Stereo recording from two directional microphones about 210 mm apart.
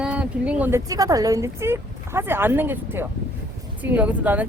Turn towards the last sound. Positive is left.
turn(degrees=-5)  # may be behind; listen again after turning